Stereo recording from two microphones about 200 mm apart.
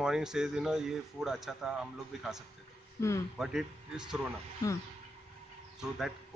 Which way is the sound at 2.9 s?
15° left (ahead or behind).